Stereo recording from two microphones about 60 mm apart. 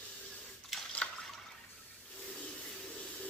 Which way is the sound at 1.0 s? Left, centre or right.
Centre.